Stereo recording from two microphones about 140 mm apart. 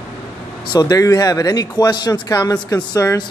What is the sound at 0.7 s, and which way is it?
A man's voice, 25° left (ahead or behind).